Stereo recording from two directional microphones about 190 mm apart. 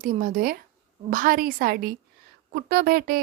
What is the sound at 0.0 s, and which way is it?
Speech, 45° right (ahead or behind).